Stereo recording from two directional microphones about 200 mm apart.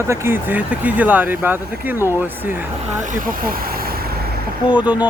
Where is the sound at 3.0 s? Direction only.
40° right (ahead or behind).